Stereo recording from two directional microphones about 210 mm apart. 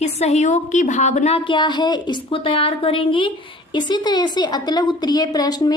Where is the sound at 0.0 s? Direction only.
30° left (ahead or behind).